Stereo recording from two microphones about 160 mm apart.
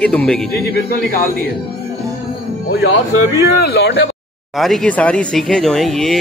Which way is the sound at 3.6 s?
90° left.